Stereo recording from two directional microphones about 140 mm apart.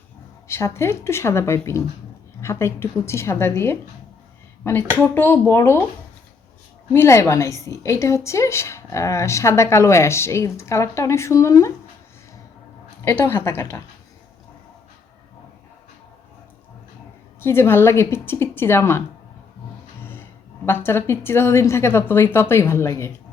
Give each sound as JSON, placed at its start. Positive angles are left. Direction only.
{"t": 0.4, "sound": "a woman's voice", "side_deg": 20}
{"t": 4.9, "sound": "a woman's voice", "side_deg": 15}
{"t": 6.9, "sound": "a woman's voice", "side_deg": 20}
{"t": 13.1, "sound": "a woman's voice", "side_deg": 15}
{"t": 17.4, "sound": "a woman's voice", "side_deg": 15}
{"t": 20.0, "sound": "a sound", "side_deg": 15}
{"t": 20.7, "sound": "a woman's voice", "side_deg": 15}